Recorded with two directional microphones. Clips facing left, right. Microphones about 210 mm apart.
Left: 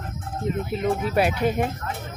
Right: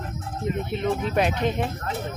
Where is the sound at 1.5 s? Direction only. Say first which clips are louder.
Left 2 dB; 50° left (ahead or behind).